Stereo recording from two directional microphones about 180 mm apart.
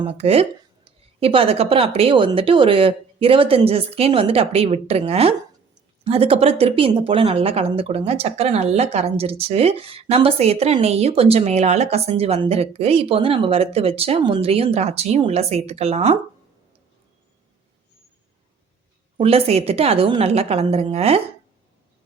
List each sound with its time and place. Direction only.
0.0 s speech: 35° right (ahead or behind)
19.1 s speech: 35° right (ahead or behind)